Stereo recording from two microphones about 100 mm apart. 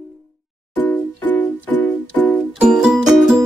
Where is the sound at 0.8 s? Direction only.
20° left (ahead or behind).